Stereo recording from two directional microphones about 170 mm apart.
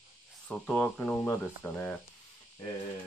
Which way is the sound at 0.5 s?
5° left (ahead or behind).